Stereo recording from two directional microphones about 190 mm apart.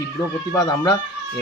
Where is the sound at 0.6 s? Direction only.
15° left (ahead or behind).